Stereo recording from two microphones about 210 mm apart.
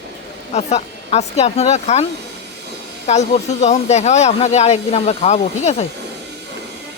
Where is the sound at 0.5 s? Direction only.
30° left (ahead or behind).